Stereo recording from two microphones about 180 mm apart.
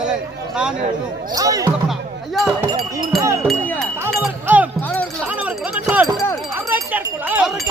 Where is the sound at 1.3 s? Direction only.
20° right (ahead or behind).